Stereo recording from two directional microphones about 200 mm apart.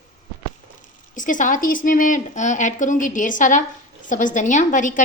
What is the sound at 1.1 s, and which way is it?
A woman's voice, 40° left (ahead or behind).